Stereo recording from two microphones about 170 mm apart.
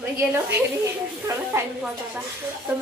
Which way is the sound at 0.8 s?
15° right (ahead or behind).